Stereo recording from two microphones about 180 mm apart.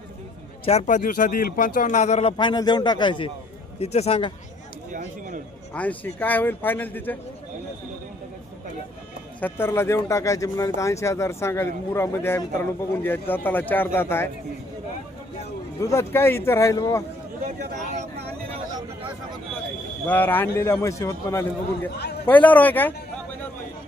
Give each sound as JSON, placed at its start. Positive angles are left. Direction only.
{"t": 0.6, "sound": "speech", "side_deg": 35}
{"t": 2.4, "sound": "a man's voice", "side_deg": 25}
{"t": 4.9, "sound": "speech", "side_deg": -45}
{"t": 5.7, "sound": "speech", "side_deg": 10}
{"t": 9.4, "sound": "speech", "side_deg": 15}
{"t": 15.8, "sound": "speech", "side_deg": 15}
{"t": 20.1, "sound": "speech", "side_deg": 10}